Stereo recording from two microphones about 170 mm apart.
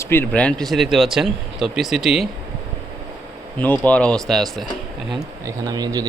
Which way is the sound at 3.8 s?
5° left (ahead or behind).